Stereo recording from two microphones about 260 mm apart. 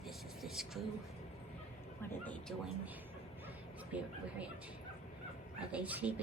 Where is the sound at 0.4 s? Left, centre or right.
Centre.